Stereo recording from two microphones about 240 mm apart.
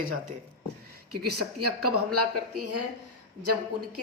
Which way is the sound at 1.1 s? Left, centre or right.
Right.